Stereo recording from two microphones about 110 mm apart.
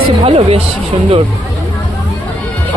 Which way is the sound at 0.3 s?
65° right (ahead or behind).